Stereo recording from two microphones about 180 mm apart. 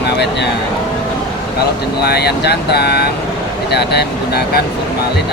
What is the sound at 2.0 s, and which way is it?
Speech, 65° left (ahead or behind).